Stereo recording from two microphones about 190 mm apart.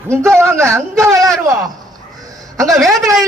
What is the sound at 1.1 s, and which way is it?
Speech, centre (ahead or behind).